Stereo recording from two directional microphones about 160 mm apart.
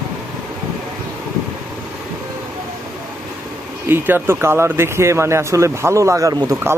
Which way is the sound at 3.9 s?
15° right (ahead or behind).